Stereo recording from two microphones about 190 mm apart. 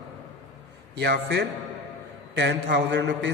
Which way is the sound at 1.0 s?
60° right (ahead or behind).